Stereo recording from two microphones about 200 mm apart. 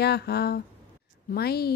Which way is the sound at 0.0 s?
55° left (ahead or behind).